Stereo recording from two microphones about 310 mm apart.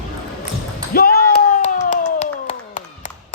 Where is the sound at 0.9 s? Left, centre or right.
Left.